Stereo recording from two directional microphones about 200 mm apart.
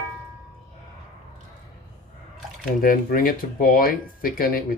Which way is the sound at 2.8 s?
45° left (ahead or behind).